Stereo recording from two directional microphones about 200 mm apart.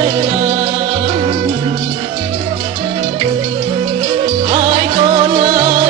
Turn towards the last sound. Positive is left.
turn(degrees=-25)  # may be behind; listen again after turning